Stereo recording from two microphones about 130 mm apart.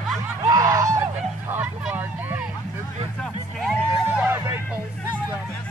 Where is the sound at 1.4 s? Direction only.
15° right (ahead or behind).